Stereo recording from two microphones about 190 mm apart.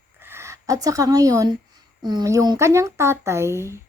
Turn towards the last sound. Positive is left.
turn(degrees=-15)  # may be behind; listen again after turning